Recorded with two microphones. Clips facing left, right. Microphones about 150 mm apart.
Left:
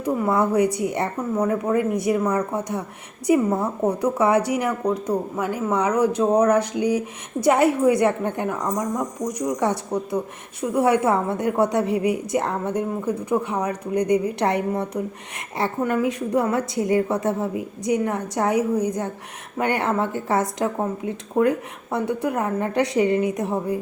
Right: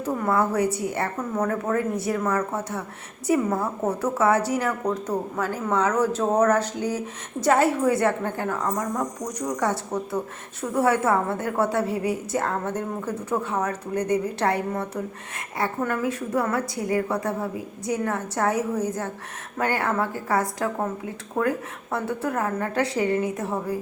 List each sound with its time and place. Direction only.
0.0 s a woman's voice: 15° left (ahead or behind)